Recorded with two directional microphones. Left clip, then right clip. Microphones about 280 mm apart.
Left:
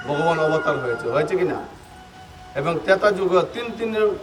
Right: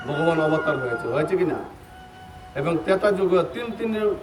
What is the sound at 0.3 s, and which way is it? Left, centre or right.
A man's voice, centre.